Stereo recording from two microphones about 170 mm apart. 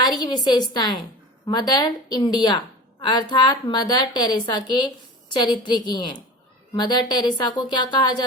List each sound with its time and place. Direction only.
0.2 s speech: 25° left (ahead or behind)